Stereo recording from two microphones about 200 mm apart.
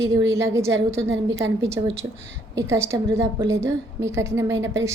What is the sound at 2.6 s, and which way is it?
A woman's voice, 15° right (ahead or behind).